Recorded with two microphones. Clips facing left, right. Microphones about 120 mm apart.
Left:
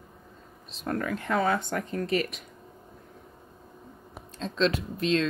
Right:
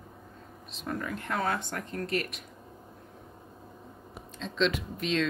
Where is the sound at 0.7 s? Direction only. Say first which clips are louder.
Left 4 dB; centre (ahead or behind).